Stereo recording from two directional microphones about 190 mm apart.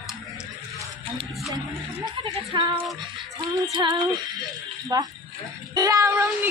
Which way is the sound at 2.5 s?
25° right (ahead or behind).